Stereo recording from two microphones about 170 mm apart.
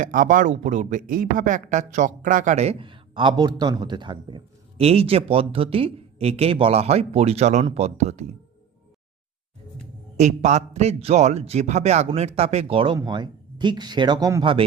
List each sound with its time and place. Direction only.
0.0 s speech: 50° right (ahead or behind)
10.2 s speech: 45° right (ahead or behind); by 14.4 s 20° right (ahead or behind)